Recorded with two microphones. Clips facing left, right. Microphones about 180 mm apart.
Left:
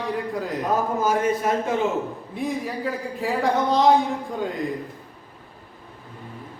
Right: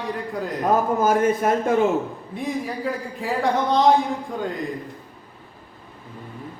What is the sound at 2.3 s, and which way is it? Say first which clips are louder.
A man's voice: even; centre (ahead or behind).